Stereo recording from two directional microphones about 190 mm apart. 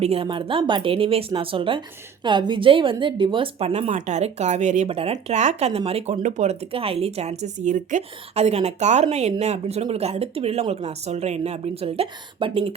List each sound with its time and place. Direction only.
0.0 s a woman's voice: 30° right (ahead or behind)